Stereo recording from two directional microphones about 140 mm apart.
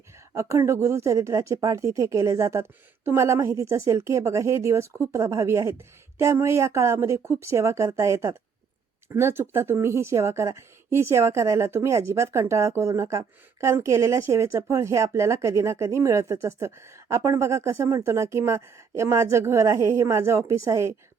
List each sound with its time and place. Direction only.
0.3 s speech: 20° right (ahead or behind)